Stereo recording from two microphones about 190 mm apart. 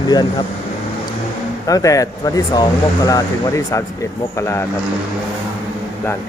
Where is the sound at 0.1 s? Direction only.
20° left (ahead or behind).